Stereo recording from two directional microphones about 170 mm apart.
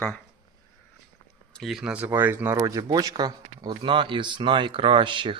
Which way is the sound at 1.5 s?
Centre (ahead or behind).